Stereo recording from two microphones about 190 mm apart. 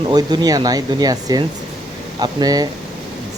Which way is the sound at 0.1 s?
20° right (ahead or behind).